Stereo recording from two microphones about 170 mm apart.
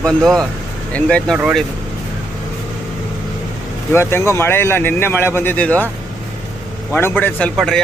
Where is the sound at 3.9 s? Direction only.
15° left (ahead or behind).